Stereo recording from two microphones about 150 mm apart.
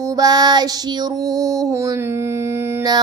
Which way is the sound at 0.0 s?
25° right (ahead or behind).